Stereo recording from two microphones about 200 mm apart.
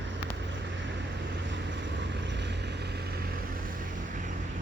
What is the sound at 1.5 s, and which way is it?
Vehicle, 65° right (ahead or behind).